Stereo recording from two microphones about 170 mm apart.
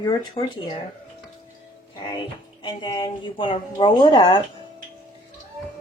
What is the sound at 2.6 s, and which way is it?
A woman's voice, 25° left (ahead or behind).